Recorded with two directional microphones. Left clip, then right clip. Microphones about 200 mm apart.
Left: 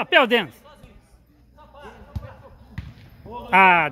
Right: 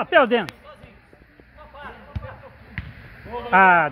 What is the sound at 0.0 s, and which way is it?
Speech, 10° left (ahead or behind).